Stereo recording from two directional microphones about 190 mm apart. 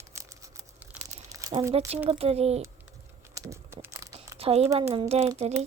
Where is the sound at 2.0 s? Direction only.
30° right (ahead or behind).